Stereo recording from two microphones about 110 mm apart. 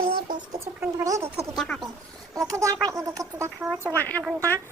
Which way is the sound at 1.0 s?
30° right (ahead or behind).